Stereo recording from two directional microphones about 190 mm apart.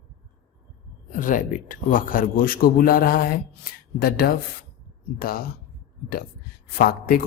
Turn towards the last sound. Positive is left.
turn(degrees=55)  # may be behind; listen again after turning